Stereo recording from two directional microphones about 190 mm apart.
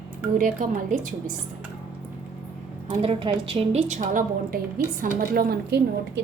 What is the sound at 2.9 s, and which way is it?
A woman's voice, 30° right (ahead or behind).